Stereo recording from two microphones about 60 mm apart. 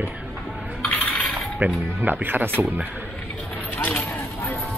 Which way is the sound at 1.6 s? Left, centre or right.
Right.